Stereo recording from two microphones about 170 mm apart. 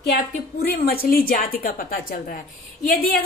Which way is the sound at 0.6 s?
65° left (ahead or behind).